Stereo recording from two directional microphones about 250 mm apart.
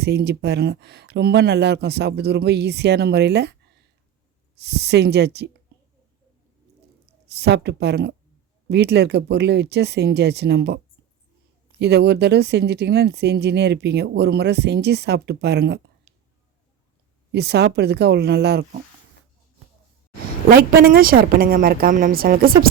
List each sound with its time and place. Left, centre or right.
0.0 s speech: right
5.7 s a sound: right
7.3 s speech: right
11.8 s speech: right
17.3 s speech: right
20.5 s speech: right